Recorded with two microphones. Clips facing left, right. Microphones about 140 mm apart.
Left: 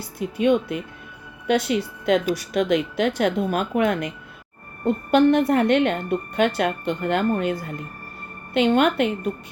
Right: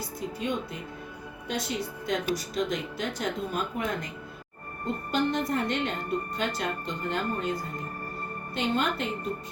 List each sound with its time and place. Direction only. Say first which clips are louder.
0.2 s a woman's voice: left 12 dB; 70° left (ahead or behind)
5.1 s a woman's voice: left 11 dB; 65° left (ahead or behind)
8.5 s a woman's voice: left 10 dB; 65° left (ahead or behind)